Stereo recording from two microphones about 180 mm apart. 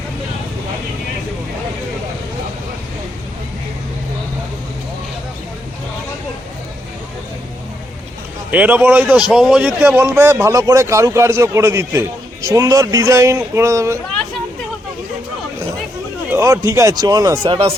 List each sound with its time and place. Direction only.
8.4 s speech: 10° right (ahead or behind)
16.3 s speech: 15° right (ahead or behind)